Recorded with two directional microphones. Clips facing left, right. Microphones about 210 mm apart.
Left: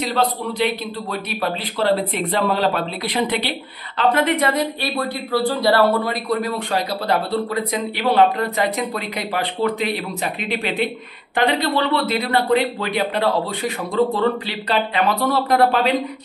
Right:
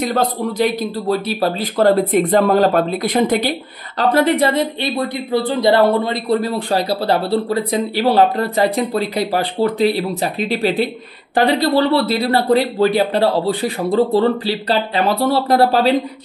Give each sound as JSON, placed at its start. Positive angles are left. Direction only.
{"t": 0.0, "sound": "a man's voice", "side_deg": -45}
{"t": 4.8, "sound": "a man's voice", "side_deg": -20}